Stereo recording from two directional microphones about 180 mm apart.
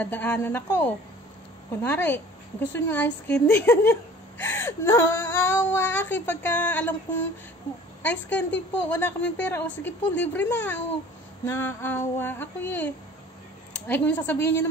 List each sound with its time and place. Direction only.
0.0 s a woman's voice: 10° left (ahead or behind)